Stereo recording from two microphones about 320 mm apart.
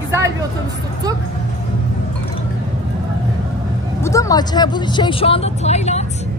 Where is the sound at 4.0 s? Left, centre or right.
Centre.